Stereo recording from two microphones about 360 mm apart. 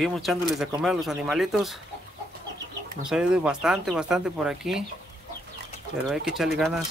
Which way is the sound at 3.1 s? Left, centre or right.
Centre.